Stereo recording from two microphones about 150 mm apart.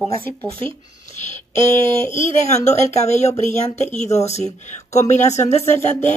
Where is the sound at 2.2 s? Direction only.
50° left (ahead or behind).